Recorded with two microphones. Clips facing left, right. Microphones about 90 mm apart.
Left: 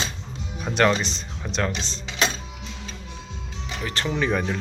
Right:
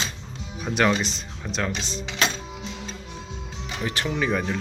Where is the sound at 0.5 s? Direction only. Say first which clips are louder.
Left 1 dB; 5° right (ahead or behind).